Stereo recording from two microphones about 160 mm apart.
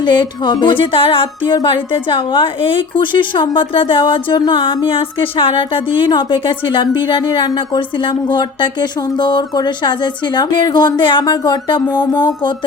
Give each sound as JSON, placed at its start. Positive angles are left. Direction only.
{"t": 0.0, "sound": "speech", "side_deg": 30}